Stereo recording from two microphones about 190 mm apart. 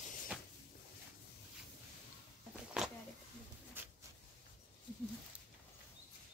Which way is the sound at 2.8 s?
5° right (ahead or behind).